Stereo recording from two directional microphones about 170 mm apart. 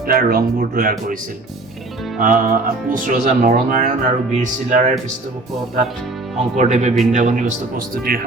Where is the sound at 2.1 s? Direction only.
50° right (ahead or behind).